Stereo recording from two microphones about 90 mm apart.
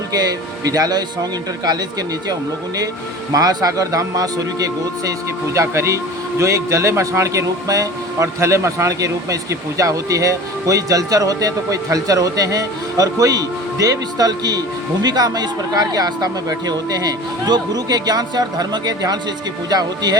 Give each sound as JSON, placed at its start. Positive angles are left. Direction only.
{"t": 0.1, "sound": "speech", "side_deg": -45}
{"t": 3.3, "sound": "speech", "side_deg": -45}